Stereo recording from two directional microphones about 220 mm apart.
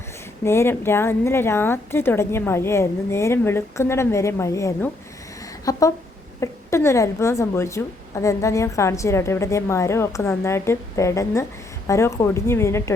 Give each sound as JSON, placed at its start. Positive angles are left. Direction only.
{"t": 0.4, "sound": "a woman's voice", "side_deg": 10}